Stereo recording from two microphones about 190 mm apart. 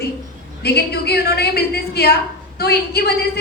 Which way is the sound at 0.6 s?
60° left (ahead or behind).